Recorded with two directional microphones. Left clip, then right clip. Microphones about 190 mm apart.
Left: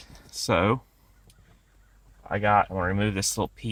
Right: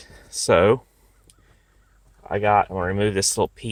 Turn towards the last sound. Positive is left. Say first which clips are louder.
# right 7 dB
turn(degrees=-50)  # may be behind; listen again after turning